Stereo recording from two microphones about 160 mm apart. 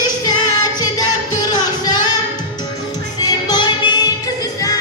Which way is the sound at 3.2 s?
25° left (ahead or behind).